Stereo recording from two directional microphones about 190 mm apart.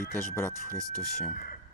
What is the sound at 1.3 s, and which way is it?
Speech, 50° left (ahead or behind).